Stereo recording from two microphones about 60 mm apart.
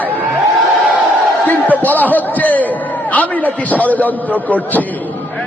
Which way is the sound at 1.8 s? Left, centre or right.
Left.